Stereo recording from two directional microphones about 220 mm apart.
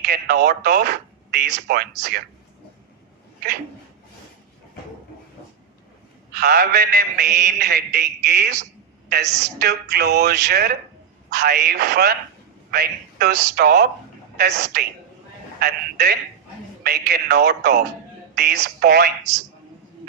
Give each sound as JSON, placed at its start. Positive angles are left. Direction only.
{"t": 0.0, "sound": "speech", "side_deg": -50}
{"t": 6.3, "sound": "a man's voice", "side_deg": -45}